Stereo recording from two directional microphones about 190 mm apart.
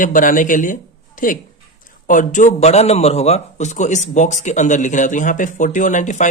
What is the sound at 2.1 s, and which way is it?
A man's voice, 40° left (ahead or behind).